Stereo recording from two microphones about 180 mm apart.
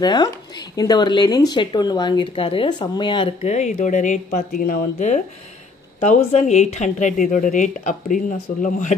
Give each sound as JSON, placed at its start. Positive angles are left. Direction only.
{"t": 0.0, "sound": "speech", "side_deg": 20}